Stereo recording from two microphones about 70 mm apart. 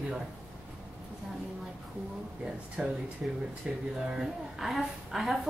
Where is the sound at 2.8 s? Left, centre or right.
Centre.